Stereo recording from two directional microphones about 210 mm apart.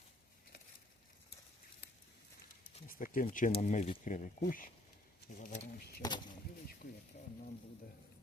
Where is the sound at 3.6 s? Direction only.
35° left (ahead or behind).